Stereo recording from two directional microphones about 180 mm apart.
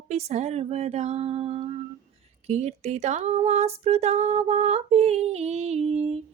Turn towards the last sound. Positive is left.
turn(degrees=-35)  # may be behind; listen again after turning